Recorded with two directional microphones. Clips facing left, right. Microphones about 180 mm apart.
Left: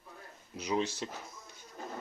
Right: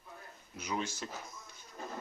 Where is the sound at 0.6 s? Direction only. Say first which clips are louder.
Left 5 dB; 30° left (ahead or behind).